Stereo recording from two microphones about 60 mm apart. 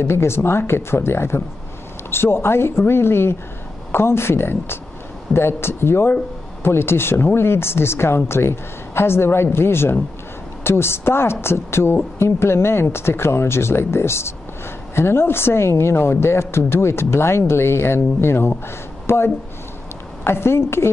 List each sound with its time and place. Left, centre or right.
0.0 s a woman's voice: left